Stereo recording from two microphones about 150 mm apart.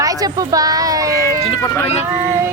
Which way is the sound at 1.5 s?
15° left (ahead or behind).